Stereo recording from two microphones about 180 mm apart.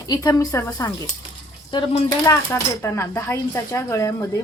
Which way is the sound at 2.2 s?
15° left (ahead or behind).